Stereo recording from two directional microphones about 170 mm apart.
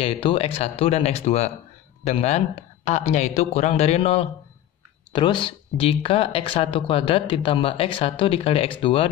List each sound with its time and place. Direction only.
0.0 s speech: 35° left (ahead or behind)